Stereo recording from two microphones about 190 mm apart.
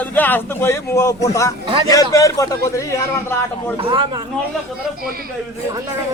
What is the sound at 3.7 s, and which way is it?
Speech, 30° right (ahead or behind).